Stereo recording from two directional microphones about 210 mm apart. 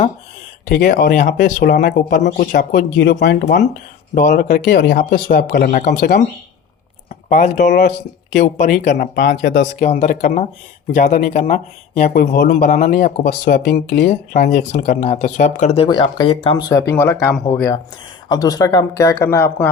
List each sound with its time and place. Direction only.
0.7 s speech: 50° left (ahead or behind)
4.1 s speech: 40° left (ahead or behind)
7.3 s speech: 35° left (ahead or behind)
12.0 s speech: 45° left (ahead or behind)
14.5 s speech: 35° left (ahead or behind); by 19.7 s 10° left (ahead or behind)